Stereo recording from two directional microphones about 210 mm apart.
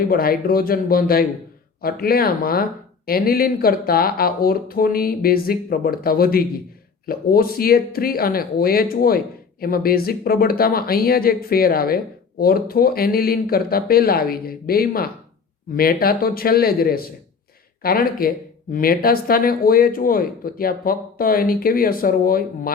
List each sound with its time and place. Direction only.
0.1 s speech: 45° left (ahead or behind)